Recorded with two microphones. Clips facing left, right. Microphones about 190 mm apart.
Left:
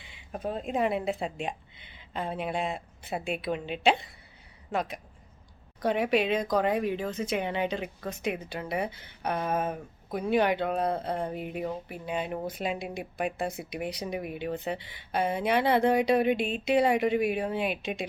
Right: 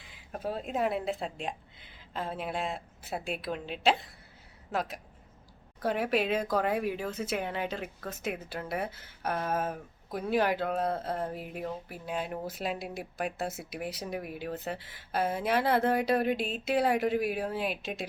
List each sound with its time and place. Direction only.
0.0 s speech: centre (ahead or behind)